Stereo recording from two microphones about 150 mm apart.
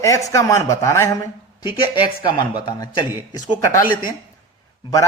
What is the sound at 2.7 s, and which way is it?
Speech, 30° left (ahead or behind).